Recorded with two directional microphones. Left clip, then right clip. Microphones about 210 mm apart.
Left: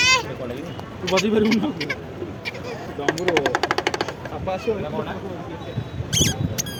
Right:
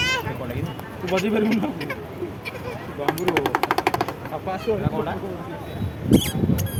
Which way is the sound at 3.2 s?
15° right (ahead or behind).